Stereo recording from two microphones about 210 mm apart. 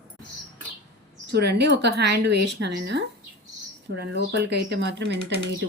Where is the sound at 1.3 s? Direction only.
55° right (ahead or behind).